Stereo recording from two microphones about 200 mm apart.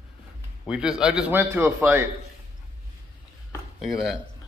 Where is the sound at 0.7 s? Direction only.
5° right (ahead or behind).